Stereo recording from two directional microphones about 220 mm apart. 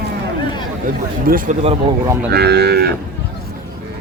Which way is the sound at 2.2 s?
50° right (ahead or behind).